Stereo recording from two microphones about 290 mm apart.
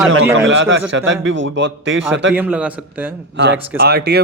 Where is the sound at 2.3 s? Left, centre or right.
Centre.